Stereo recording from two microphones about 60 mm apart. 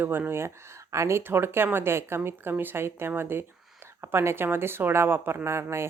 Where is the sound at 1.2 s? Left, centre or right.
Right.